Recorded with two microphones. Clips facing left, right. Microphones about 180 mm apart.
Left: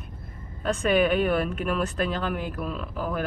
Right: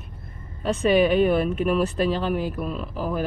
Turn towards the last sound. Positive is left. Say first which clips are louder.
# right 3 dB
turn(degrees=-5)  # may be behind; listen again after turning